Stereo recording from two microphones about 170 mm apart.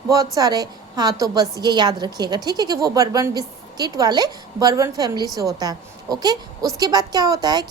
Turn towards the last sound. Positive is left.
turn(degrees=-25)  # may be behind; listen again after turning